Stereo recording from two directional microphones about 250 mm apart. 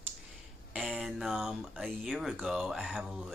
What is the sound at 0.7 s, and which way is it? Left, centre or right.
Speech, centre.